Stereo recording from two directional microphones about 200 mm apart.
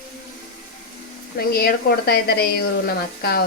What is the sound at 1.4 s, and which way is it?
Speech, 50° left (ahead or behind).